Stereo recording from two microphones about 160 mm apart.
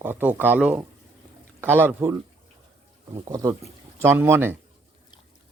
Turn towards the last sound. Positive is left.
turn(degrees=-15)  # may be behind; listen again after turning